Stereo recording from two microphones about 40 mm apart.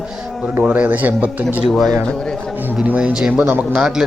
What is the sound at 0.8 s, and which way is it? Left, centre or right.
Speech, right.